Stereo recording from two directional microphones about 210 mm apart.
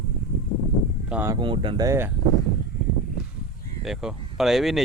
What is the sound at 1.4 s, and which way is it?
Speech, 25° right (ahead or behind).